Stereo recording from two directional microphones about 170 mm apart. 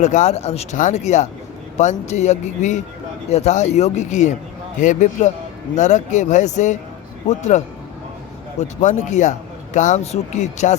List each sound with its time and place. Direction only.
0.0 s speech: 40° left (ahead or behind)
8.6 s speech: 45° left (ahead or behind)